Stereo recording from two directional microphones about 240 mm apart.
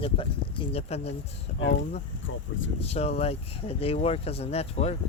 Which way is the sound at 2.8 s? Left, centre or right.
Left.